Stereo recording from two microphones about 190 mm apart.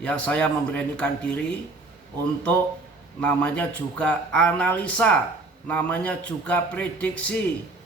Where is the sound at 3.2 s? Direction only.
5° left (ahead or behind).